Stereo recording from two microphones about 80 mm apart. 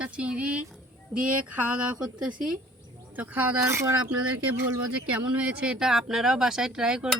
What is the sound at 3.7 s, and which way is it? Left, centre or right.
Speech, right.